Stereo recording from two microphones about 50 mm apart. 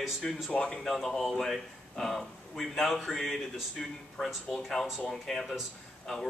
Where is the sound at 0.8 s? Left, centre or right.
Centre.